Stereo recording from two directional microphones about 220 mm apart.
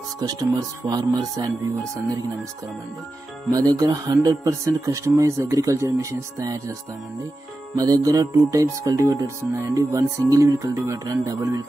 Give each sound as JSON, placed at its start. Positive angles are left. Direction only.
{"t": 0.3, "sound": "speech", "side_deg": -15}
{"t": 3.5, "sound": "speech", "side_deg": -15}
{"t": 7.7, "sound": "speech", "side_deg": -15}